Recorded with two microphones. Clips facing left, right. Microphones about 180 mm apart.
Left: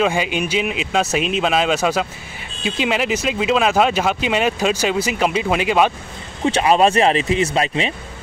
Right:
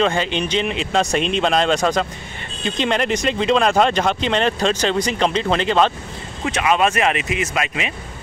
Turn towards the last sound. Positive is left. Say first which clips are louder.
# left 4 dB
turn(degrees=30)  # may be behind; listen again after turning